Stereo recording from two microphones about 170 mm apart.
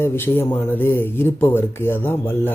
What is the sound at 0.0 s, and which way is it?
Speech, 15° left (ahead or behind).